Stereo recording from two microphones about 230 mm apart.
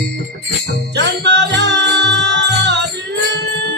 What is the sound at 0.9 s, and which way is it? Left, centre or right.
Music, right.